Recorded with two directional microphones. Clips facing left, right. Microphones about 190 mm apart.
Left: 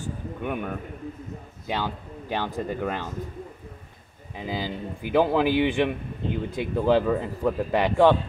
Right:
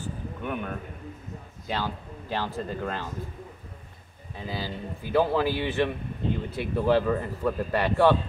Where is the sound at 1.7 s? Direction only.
15° left (ahead or behind).